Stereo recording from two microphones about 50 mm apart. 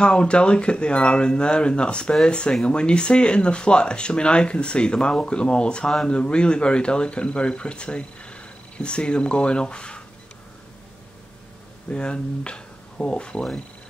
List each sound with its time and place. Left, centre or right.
0.0 s speech: left
11.9 s speech: centre